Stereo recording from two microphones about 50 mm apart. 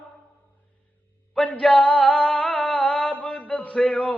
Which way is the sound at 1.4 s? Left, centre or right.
Centre.